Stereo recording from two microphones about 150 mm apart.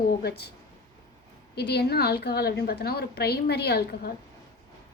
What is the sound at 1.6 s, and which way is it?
A woman's voice, 90° left.